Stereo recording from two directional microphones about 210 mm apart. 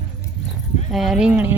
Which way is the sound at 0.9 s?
Centre (ahead or behind).